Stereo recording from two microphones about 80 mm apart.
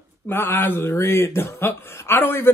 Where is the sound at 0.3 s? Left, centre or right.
Left.